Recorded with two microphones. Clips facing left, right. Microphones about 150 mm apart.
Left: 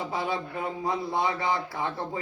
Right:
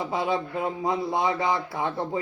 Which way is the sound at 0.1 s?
20° right (ahead or behind).